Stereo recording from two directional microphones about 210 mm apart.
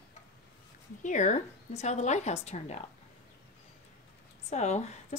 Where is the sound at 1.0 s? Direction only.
35° left (ahead or behind).